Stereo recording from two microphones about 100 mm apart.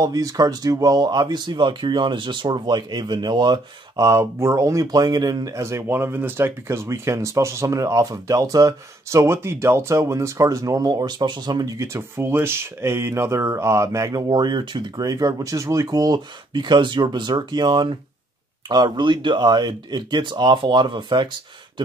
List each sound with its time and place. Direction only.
0.0 s speech: 35° right (ahead or behind)
4.0 s speech: 25° right (ahead or behind)
14.3 s speech: 45° right (ahead or behind)